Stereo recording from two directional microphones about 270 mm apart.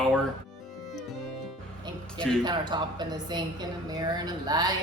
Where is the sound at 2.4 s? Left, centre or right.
Centre.